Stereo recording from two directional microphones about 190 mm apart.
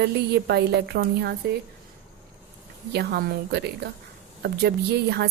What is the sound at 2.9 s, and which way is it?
A woman's voice, 60° right (ahead or behind).